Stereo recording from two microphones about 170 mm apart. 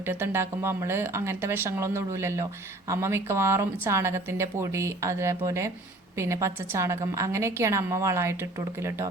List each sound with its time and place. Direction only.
0.0 s speech: 15° right (ahead or behind)